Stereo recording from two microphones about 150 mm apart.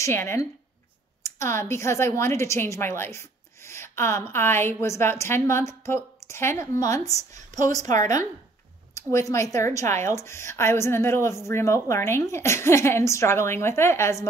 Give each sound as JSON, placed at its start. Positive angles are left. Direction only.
{"t": 0.0, "sound": "a woman's voice", "side_deg": 15}
{"t": 8.9, "sound": "a woman's voice", "side_deg": 20}